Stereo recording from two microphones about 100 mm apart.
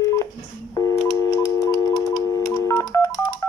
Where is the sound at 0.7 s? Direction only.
35° left (ahead or behind).